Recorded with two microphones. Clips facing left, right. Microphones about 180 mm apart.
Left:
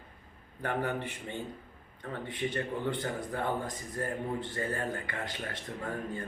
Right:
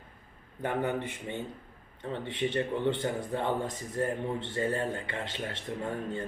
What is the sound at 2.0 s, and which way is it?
Speech, 25° right (ahead or behind).